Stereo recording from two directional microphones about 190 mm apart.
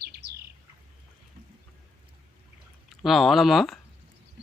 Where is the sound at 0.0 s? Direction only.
60° right (ahead or behind).